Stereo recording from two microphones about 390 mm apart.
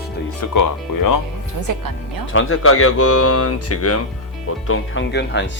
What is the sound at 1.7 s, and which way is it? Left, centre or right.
Speech, right.